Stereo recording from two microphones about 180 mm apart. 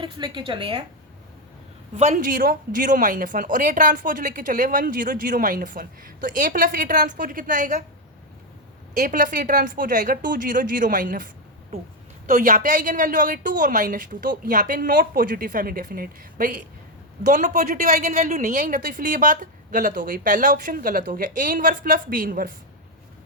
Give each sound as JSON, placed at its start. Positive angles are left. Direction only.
{"t": 0.0, "sound": "a woman's voice", "side_deg": -25}
{"t": 2.0, "sound": "speech", "side_deg": -40}
{"t": 9.0, "sound": "speech", "side_deg": -45}